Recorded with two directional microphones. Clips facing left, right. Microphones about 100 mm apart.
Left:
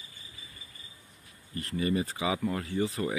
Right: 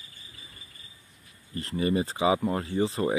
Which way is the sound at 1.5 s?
30° right (ahead or behind).